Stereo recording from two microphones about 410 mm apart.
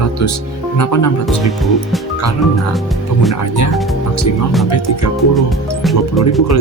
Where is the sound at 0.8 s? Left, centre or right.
Left.